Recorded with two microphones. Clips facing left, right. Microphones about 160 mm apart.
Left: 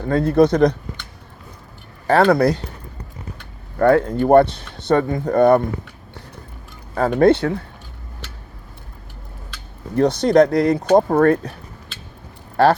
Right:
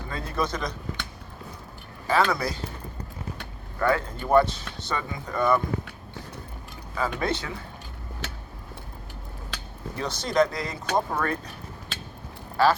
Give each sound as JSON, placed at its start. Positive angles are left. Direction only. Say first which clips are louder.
{"t": 0.0, "sound": "speech", "louder": "left 15 dB", "side_deg": 60}
{"t": 2.0, "sound": "speech", "louder": "left 10 dB", "side_deg": 55}
{"t": 3.8, "sound": "speech", "louder": "left 10 dB", "side_deg": 60}
{"t": 6.9, "sound": "speech", "louder": "left 13 dB", "side_deg": 55}
{"t": 9.9, "sound": "speech", "louder": "left 13 dB", "side_deg": 60}